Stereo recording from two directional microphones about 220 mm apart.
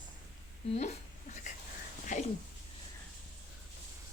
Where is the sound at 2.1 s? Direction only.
35° left (ahead or behind).